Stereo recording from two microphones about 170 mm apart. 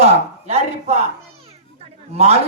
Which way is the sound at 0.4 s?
40° right (ahead or behind).